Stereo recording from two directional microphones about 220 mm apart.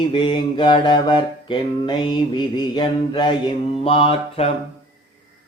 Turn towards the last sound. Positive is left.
turn(degrees=25)  # may be behind; listen again after turning